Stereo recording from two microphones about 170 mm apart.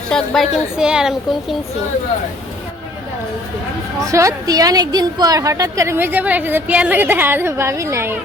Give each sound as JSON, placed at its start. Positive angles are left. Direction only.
{"t": 0.1, "sound": "a woman's voice", "side_deg": 5}
{"t": 4.0, "sound": "a woman's voice", "side_deg": -20}